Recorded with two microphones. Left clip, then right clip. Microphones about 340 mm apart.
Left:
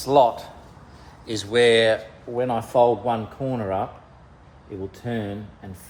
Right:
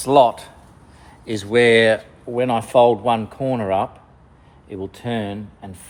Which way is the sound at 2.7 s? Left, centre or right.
Right.